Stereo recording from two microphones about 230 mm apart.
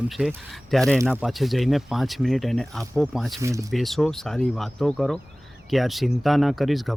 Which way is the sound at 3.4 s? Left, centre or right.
Centre.